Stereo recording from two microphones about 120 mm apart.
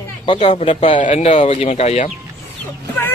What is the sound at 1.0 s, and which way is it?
Speech, 65° left (ahead or behind).